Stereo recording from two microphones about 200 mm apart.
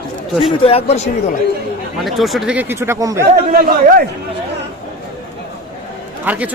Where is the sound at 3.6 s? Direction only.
45° right (ahead or behind).